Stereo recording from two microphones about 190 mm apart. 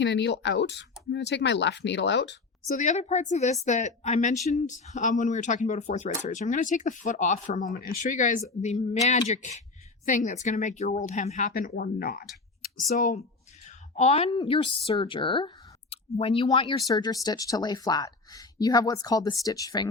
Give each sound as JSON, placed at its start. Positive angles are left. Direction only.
{"t": 0.0, "sound": "speech", "side_deg": 65}
{"t": 2.6, "sound": "speech", "side_deg": 40}
{"t": 12.9, "sound": "a woman's voice", "side_deg": 40}